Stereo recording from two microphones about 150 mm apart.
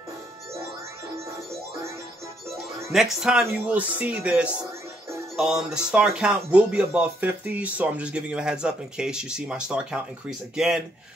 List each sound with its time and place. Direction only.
1.1 s music: 20° right (ahead or behind)
2.5 s speech: centre (ahead or behind)